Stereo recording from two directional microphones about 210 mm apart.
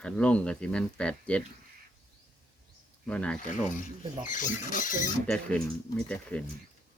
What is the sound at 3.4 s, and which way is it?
Speech, 40° left (ahead or behind).